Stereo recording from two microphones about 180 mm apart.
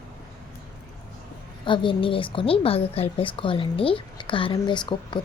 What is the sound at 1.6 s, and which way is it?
A woman's voice, 25° left (ahead or behind).